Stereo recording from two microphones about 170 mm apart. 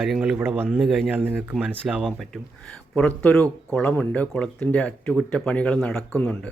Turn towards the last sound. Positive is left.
turn(degrees=5)  # may be behind; listen again after turning